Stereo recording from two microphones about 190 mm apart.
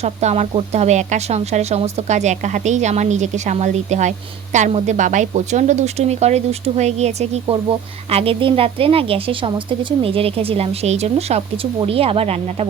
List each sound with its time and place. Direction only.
0.0 s a woman's voice: 35° right (ahead or behind)